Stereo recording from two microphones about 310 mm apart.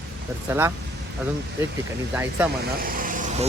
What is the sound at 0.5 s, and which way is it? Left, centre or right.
Speech, centre.